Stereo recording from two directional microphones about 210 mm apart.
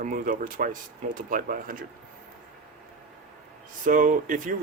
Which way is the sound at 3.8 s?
40° right (ahead or behind).